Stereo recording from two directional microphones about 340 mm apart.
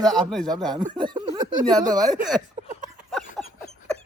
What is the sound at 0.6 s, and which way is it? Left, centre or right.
Speech, centre.